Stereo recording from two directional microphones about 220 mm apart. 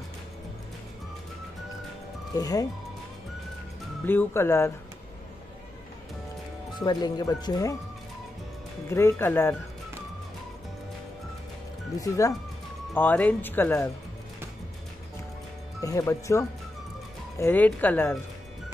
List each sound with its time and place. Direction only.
2.3 s speech: 15° left (ahead or behind)
4.0 s speech: 10° left (ahead or behind)
6.8 s speech: 20° left (ahead or behind)
8.9 s speech: 10° left (ahead or behind)
12.0 s speech: 15° left (ahead or behind)
15.8 s speech: 15° left (ahead or behind)